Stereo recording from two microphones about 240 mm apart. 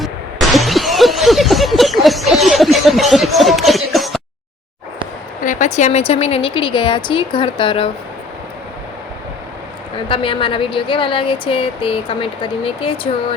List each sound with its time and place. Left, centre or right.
0.0 s a sound: centre
5.5 s speech: left
10.1 s speech: left